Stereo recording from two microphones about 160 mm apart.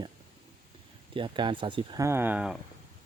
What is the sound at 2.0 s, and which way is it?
Speech, 15° right (ahead or behind).